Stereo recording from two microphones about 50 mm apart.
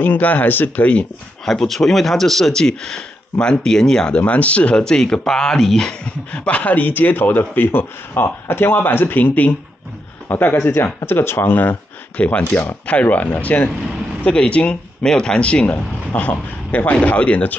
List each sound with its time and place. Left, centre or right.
0.0 s speech: left
1.4 s speech: centre
2.6 s speech: centre
4.2 s speech: left; by 5.9 s centre
6.3 s speech: left
12.2 s speech: left
15.6 s speech: left